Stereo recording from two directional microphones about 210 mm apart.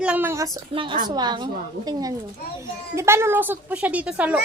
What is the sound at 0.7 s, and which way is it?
A woman's voice, 25° right (ahead or behind).